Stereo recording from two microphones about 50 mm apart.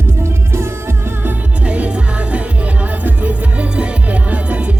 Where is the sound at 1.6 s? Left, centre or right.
Right.